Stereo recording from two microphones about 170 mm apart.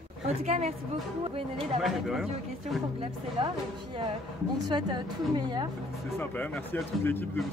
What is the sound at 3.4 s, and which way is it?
Speech, 30° right (ahead or behind).